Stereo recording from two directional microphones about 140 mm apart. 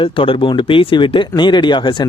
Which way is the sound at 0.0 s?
40° left (ahead or behind).